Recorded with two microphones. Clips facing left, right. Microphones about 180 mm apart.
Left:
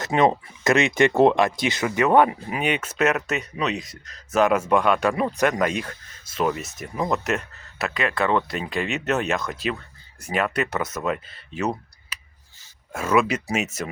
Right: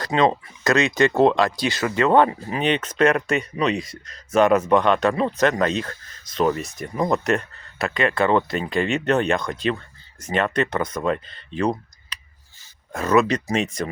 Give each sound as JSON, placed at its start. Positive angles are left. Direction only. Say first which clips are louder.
{"t": 0.0, "sound": "speech", "louder": "even", "side_deg": 25}
{"t": 12.1, "sound": "a sound", "louder": "right 1 dB", "side_deg": 5}
{"t": 12.9, "sound": "speech", "louder": "right 2 dB", "side_deg": 10}